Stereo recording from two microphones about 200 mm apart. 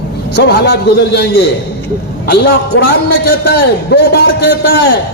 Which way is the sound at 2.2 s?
55° left (ahead or behind).